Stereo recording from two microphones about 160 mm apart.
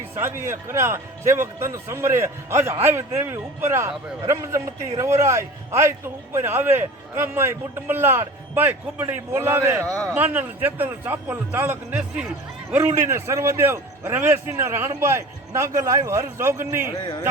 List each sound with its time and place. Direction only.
0.2 s a man's voice: 15° right (ahead or behind)
9.8 s speech: 5° left (ahead or behind)
10.2 s a man's voice: 10° right (ahead or behind)
17.0 s speech: 30° left (ahead or behind)